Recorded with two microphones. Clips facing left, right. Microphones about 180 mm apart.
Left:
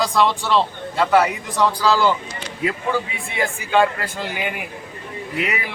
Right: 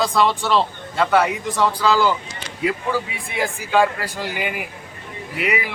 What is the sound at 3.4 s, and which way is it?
A man's voice, 5° right (ahead or behind).